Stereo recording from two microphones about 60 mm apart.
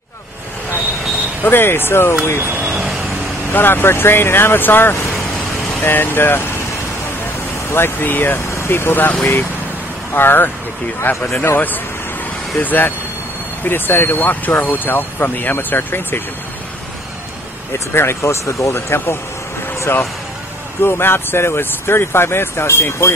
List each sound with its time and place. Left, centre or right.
1.4 s speech: left
2.4 s vehicle: right
3.5 s speech: left
7.7 s speech: left
17.7 s speech: left